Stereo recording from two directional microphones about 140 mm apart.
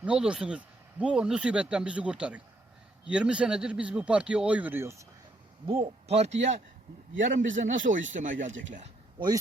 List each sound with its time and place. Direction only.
0.0 s speech: 5° right (ahead or behind)
5.8 s speech: 50° right (ahead or behind)
7.2 s a man's voice: 65° right (ahead or behind)
9.1 s speech: 30° right (ahead or behind)